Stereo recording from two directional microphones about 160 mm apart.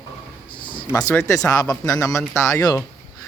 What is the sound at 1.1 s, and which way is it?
Speech, 15° left (ahead or behind).